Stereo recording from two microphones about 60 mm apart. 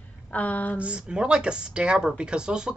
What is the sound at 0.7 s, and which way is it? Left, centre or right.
Speech, centre.